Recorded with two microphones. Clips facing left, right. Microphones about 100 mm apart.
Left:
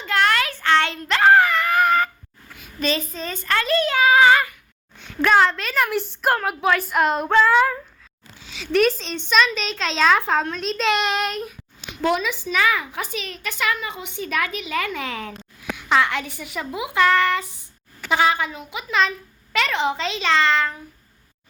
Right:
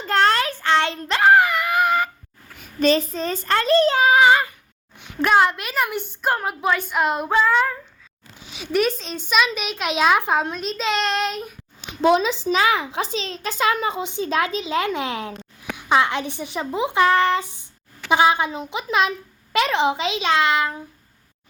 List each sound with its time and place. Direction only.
0.0 s a sound: 35° right (ahead or behind); by 2.0 s 10° right (ahead or behind)
3.1 s a child's voice: 40° right (ahead or behind); by 5.7 s 15° right (ahead or behind)
5.7 s speech: centre (ahead or behind)
8.4 s a sound: 15° right (ahead or behind)
8.7 s a child's voice: centre (ahead or behind)
10.6 s speech: centre (ahead or behind)
12.0 s a child's voice: 25° right (ahead or behind)